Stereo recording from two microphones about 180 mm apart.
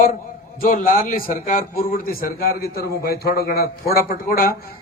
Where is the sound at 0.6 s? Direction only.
50° left (ahead or behind).